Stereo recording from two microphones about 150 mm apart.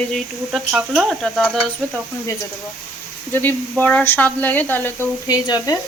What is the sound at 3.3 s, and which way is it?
Speech, 10° left (ahead or behind).